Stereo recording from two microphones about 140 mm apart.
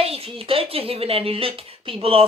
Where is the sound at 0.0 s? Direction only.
45° right (ahead or behind).